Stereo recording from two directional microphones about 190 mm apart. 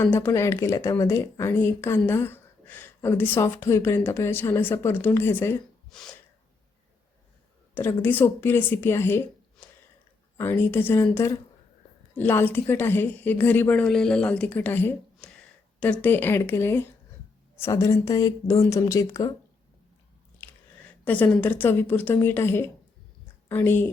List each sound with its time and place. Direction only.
0.0 s a woman's voice: 10° left (ahead or behind)
7.8 s a woman's voice: 10° left (ahead or behind)
20.8 s a woman's voice: 5° left (ahead or behind)